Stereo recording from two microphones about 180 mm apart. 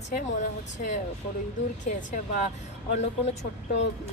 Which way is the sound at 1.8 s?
45° left (ahead or behind).